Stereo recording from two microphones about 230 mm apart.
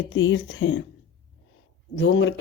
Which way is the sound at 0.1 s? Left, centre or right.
Left.